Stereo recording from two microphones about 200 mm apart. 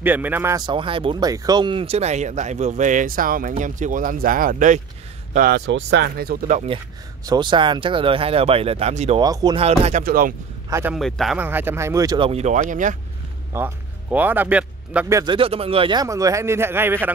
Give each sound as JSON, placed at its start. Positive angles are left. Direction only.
{"t": 0.0, "sound": "speech", "side_deg": -10}
{"t": 5.7, "sound": "speech", "side_deg": -60}
{"t": 7.2, "sound": "speech", "side_deg": -20}
{"t": 9.2, "sound": "speech", "side_deg": -20}
{"t": 10.0, "sound": "speech", "side_deg": -45}
{"t": 10.7, "sound": "speech", "side_deg": -10}
{"t": 11.0, "sound": "a man's voice", "side_deg": 0}
{"t": 12.3, "sound": "speech", "side_deg": -35}
{"t": 13.5, "sound": "a man's voice", "side_deg": -10}